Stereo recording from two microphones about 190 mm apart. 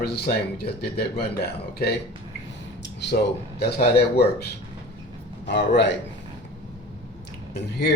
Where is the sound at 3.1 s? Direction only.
50° left (ahead or behind).